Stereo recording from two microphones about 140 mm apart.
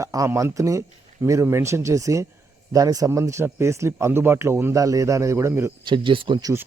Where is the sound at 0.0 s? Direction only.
25° right (ahead or behind).